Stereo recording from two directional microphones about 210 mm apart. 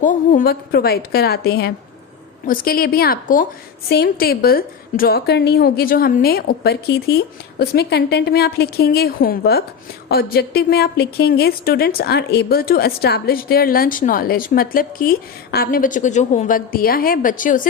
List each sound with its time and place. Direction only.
0.0 s a woman's voice: 40° left (ahead or behind)